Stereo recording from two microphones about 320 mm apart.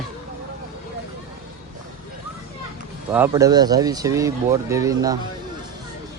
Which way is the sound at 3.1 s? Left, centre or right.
Centre.